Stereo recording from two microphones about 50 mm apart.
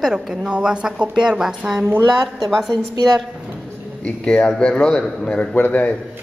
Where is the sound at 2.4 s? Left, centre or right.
Centre.